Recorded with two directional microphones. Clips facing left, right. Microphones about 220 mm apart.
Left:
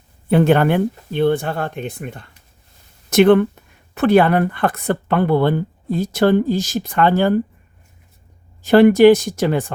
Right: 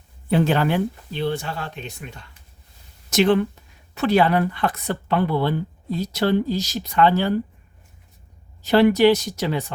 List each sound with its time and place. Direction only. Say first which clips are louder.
0.3 s speech: left 5 dB; 55° left (ahead or behind)
8.6 s speech: left 6 dB; 50° left (ahead or behind)